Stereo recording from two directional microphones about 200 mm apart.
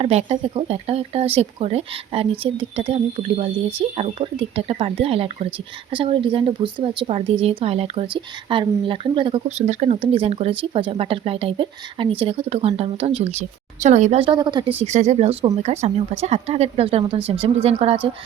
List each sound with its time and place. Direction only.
0.0 s speech: 30° right (ahead or behind)
14.8 s speech: 35° right (ahead or behind)